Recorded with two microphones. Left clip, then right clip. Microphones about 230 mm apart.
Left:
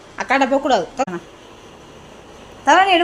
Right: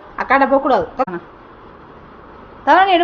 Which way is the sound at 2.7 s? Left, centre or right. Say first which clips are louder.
Right 1 dB; centre.